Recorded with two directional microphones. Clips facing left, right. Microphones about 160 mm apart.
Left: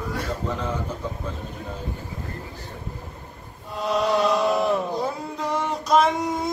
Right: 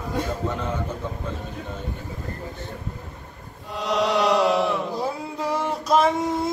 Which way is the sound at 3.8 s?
90° right.